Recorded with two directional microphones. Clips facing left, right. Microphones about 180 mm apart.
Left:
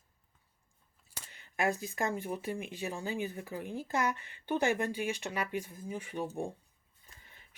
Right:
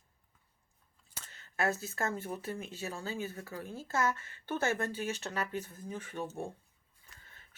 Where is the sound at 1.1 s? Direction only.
15° left (ahead or behind).